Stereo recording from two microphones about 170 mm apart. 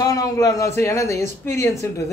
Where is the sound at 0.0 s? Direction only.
20° left (ahead or behind).